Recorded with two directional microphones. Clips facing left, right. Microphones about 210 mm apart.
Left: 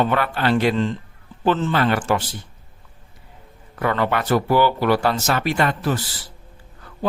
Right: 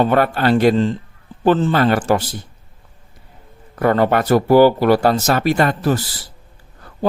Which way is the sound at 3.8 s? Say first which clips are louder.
Right 6 dB; 40° right (ahead or behind).